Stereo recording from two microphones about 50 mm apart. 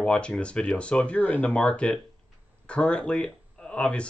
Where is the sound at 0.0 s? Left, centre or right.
Left.